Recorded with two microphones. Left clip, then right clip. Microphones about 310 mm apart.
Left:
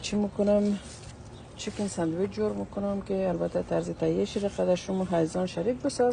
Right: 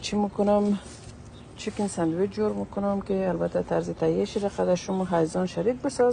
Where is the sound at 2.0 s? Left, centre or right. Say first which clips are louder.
Right 3 dB; right.